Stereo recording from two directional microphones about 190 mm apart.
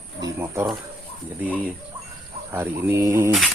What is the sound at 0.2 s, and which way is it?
Pigeon, 15° right (ahead or behind).